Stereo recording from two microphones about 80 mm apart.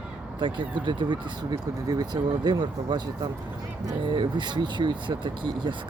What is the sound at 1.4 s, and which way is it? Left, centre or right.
Speech, right.